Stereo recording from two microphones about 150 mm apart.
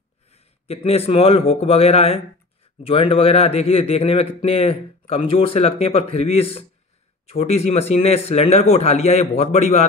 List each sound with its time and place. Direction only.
0.3 s a man's voice: 40° left (ahead or behind)